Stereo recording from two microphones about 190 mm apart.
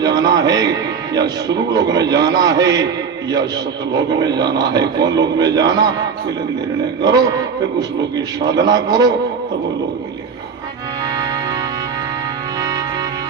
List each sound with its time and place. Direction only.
0.0 s music: 20° right (ahead or behind)
1.1 s a man's voice: 20° right (ahead or behind)
3.9 s a man's voice: 20° right (ahead or behind)
5.0 s a man's voice: 65° right (ahead or behind)
5.4 s a man's voice: 20° right (ahead or behind)
7.0 s a man's voice: 20° right (ahead or behind)
8.6 s a man's voice: 20° right (ahead or behind)